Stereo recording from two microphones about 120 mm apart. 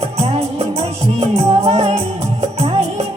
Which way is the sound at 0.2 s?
60° right (ahead or behind).